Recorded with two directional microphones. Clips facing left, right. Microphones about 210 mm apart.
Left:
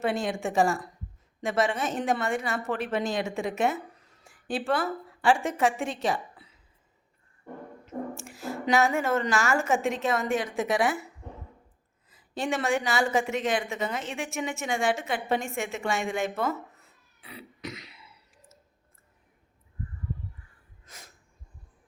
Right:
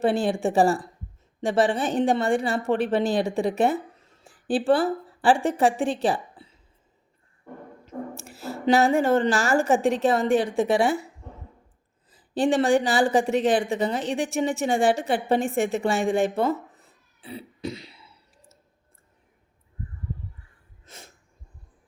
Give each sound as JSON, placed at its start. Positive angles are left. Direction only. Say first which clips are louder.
{"t": 0.0, "sound": "a woman's voice", "louder": "right 6 dB", "side_deg": -35}
{"t": 7.9, "sound": "a sound", "louder": "even", "side_deg": -35}
{"t": 8.6, "sound": "speech", "louder": "right 5 dB", "side_deg": -30}
{"t": 12.1, "sound": "speech", "louder": "right 8 dB", "side_deg": -30}
{"t": 20.8, "sound": "snort", "louder": "right 4 dB", "side_deg": -25}